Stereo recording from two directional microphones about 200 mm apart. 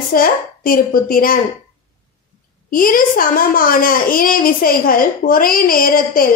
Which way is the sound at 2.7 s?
45° left (ahead or behind).